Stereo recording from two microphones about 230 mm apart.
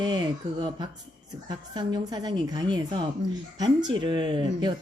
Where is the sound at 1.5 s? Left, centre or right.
Centre.